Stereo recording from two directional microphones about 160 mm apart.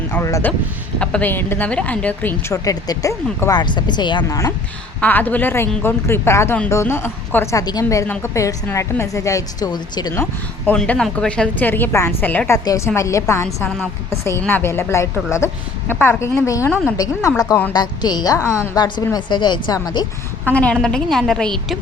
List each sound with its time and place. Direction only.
0.1 s speech: 20° left (ahead or behind)
0.9 s speech: 5° left (ahead or behind)
2.6 s a woman's voice: 20° left (ahead or behind)
4.3 s a woman's voice: 20° left (ahead or behind)
10.7 s a woman's voice: 5° left (ahead or behind); by 20.1 s 25° left (ahead or behind)
20.4 s a woman's voice: 10° left (ahead or behind)